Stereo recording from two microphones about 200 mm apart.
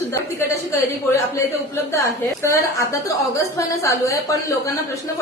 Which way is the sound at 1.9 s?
15° left (ahead or behind).